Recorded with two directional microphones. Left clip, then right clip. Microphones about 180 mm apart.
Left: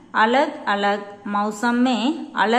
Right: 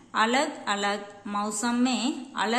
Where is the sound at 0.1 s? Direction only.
15° right (ahead or behind).